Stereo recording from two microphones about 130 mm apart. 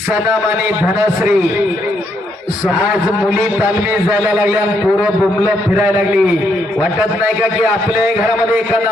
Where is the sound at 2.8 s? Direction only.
15° right (ahead or behind).